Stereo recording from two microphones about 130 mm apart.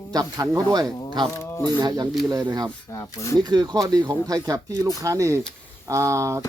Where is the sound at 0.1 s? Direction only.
30° right (ahead or behind).